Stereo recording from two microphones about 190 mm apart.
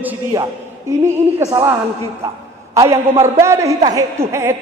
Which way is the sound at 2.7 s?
15° right (ahead or behind).